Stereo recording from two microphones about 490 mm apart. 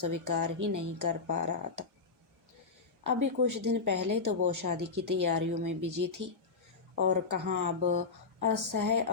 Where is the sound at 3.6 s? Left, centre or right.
Right.